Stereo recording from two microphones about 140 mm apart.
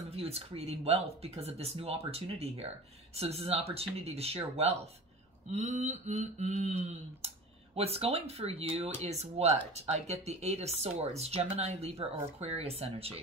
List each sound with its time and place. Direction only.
0.1 s speech: 45° right (ahead or behind)
5.5 s a sound: 55° right (ahead or behind)
7.7 s speech: 45° right (ahead or behind)